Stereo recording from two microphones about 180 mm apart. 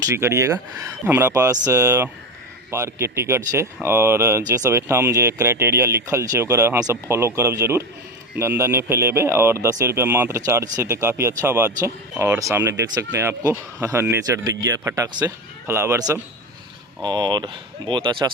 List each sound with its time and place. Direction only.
0.0 s speech: 15° right (ahead or behind)